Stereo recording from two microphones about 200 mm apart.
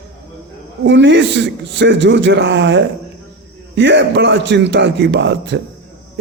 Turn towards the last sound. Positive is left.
turn(degrees=-60)  # may be behind; listen again after turning